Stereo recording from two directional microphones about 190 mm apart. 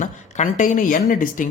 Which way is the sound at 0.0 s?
40° left (ahead or behind).